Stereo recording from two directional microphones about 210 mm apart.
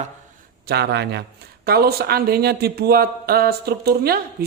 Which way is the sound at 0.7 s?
50° right (ahead or behind).